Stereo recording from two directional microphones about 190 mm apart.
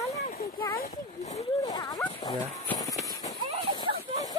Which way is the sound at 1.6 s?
20° left (ahead or behind).